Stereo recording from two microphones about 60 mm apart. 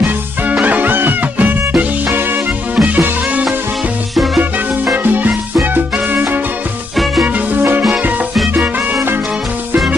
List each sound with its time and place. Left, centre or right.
0.0 s music: right
2.7 s music: right
4.9 s music: right